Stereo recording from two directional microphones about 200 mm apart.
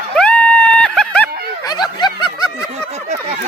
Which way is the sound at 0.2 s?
5° left (ahead or behind).